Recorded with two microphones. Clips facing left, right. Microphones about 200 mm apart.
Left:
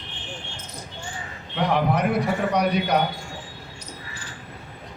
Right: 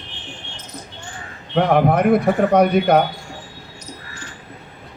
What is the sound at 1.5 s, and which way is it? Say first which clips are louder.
A man's voice: right 7 dB; 55° right (ahead or behind).